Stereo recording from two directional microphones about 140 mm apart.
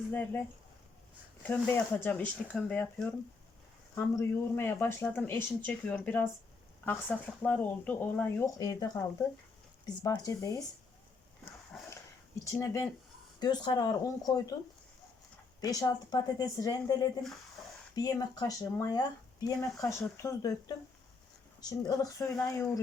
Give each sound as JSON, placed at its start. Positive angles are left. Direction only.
{"t": 1.5, "sound": "speech", "side_deg": 15}
{"t": 11.7, "sound": "dog", "side_deg": 0}
{"t": 12.5, "sound": "speech", "side_deg": 20}
{"t": 15.6, "sound": "speech", "side_deg": 25}